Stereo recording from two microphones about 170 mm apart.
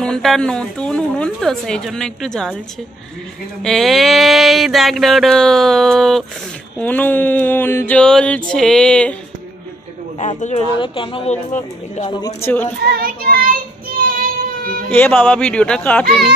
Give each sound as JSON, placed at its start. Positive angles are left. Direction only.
{"t": 0.0, "sound": "mantra", "side_deg": 5}
{"t": 3.6, "sound": "mantra", "side_deg": 0}
{"t": 6.8, "sound": "a sound", "side_deg": 10}
{"t": 8.5, "sound": "mantra", "side_deg": 5}
{"t": 10.1, "sound": "speech", "side_deg": 40}
{"t": 10.8, "sound": "speech", "side_deg": 30}
{"t": 11.5, "sound": "speech", "side_deg": 40}
{"t": 12.1, "sound": "speech", "side_deg": 25}
{"t": 12.8, "sound": "child singing", "side_deg": -60}
{"t": 14.9, "sound": "a sound", "side_deg": 10}